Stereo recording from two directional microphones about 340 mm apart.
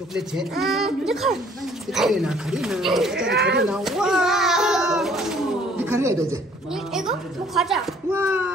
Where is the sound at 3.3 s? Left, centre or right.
Right.